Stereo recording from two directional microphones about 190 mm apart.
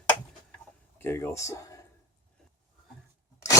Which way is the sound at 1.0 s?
15° left (ahead or behind).